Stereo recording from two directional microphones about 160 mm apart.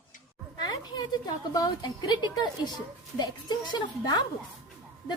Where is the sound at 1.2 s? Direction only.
25° left (ahead or behind).